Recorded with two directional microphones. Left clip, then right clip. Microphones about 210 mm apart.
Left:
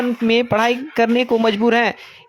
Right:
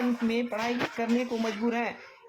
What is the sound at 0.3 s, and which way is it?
Speech, 50° left (ahead or behind).